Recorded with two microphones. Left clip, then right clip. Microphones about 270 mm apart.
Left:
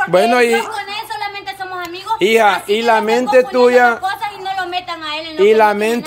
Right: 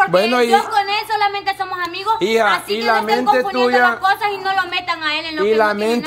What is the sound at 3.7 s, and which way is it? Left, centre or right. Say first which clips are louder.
Speech: left 3 dB; left.